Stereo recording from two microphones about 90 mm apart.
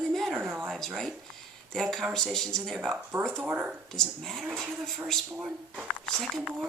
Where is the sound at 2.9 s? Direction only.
25° right (ahead or behind).